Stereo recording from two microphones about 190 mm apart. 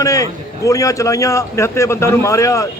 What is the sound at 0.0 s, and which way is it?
A man's voice, 15° left (ahead or behind).